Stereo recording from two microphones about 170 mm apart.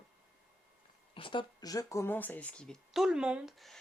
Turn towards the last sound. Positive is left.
turn(degrees=0)  # may be behind; listen again after turning